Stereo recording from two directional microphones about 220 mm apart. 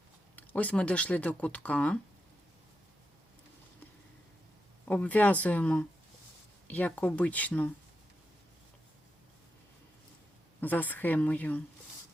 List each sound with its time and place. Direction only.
0.3 s speech: 5° left (ahead or behind)
4.9 s speech: 5° left (ahead or behind)
10.6 s speech: 10° left (ahead or behind)